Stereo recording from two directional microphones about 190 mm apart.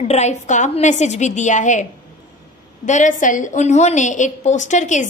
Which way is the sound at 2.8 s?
40° left (ahead or behind).